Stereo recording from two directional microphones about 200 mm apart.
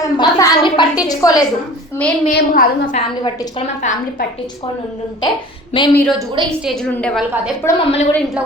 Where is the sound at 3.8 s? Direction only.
40° left (ahead or behind).